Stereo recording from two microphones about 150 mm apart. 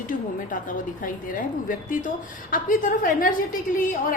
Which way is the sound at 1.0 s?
65° left (ahead or behind).